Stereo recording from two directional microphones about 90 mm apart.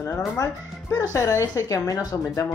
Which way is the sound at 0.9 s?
35° left (ahead or behind).